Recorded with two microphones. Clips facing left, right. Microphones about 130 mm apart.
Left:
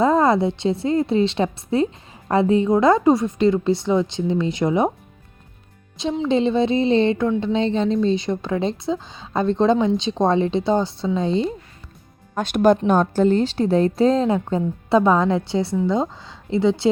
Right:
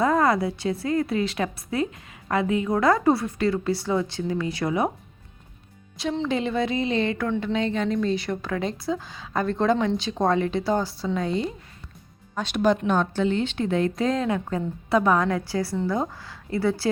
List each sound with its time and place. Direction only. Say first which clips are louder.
0.0 s a woman's voice: left 4 dB; 25° left (ahead or behind)
6.2 s a woman's voice: left 8 dB; 25° left (ahead or behind)
12.3 s a woman's voice: left 6 dB; 50° left (ahead or behind); by 16.9 s 20° left (ahead or behind)